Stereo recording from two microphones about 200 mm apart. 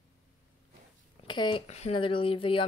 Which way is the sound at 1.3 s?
25° left (ahead or behind).